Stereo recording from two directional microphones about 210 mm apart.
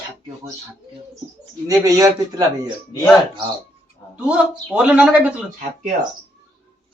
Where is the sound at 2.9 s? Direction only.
10° left (ahead or behind).